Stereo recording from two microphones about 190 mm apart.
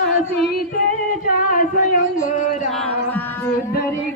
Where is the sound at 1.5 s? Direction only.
45° left (ahead or behind).